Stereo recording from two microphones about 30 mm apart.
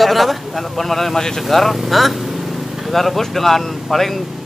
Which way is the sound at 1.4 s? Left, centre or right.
Centre.